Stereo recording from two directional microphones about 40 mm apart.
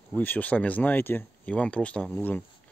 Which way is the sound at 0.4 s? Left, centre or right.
Left.